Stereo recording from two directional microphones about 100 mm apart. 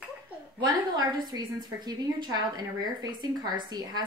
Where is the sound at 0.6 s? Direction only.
40° right (ahead or behind).